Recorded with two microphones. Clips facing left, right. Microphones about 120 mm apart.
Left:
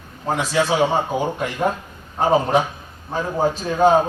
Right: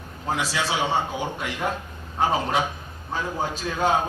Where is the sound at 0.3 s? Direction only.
45° left (ahead or behind).